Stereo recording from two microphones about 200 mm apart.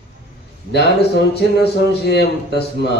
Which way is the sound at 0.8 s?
55° left (ahead or behind).